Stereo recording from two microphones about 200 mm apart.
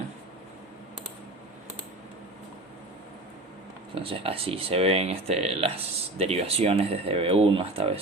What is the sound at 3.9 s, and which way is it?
Speech, 25° right (ahead or behind).